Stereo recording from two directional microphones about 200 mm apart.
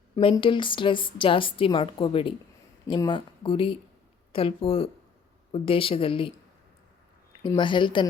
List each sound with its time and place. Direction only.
0.2 s a woman's voice: 25° left (ahead or behind)
7.4 s a woman's voice: 25° left (ahead or behind)